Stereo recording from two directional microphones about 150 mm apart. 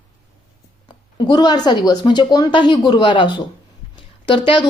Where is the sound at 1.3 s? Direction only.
25° left (ahead or behind).